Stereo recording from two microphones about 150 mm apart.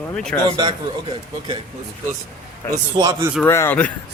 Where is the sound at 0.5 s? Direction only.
30° right (ahead or behind).